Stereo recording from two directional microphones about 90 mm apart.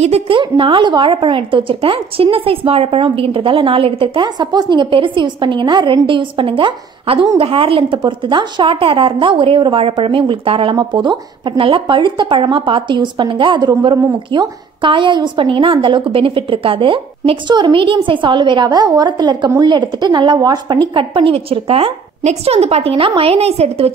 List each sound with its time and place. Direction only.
0.3 s a woman's voice: 75° right (ahead or behind)
8.0 s a woman's voice: 60° right (ahead or behind)
14.8 s a woman's voice: 65° right (ahead or behind)
20.9 s a woman's voice: 70° right (ahead or behind); by 23.3 s 90° right